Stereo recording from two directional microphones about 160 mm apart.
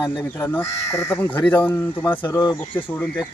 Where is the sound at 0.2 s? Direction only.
10° left (ahead or behind).